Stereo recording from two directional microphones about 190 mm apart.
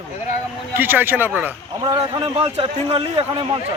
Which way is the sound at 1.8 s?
20° right (ahead or behind).